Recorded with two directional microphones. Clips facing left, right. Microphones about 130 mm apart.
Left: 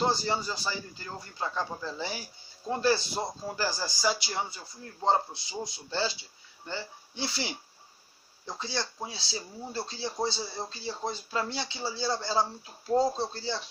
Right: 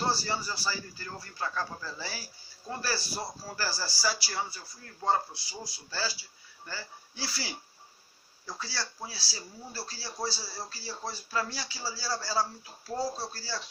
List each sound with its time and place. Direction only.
0.0 s a man's voice: 20° left (ahead or behind)